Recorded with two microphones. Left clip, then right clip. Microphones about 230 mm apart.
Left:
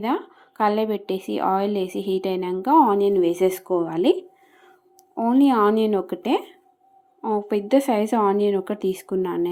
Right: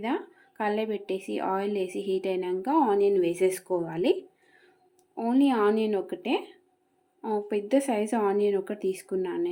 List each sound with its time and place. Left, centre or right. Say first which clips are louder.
0.0 s a woman's voice: left 6 dB; centre
7.2 s a woman's voice: left 6 dB; centre